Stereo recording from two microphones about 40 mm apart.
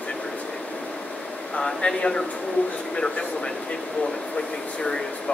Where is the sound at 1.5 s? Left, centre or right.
Left.